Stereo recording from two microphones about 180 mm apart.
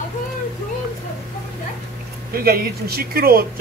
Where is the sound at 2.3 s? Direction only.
55° right (ahead or behind).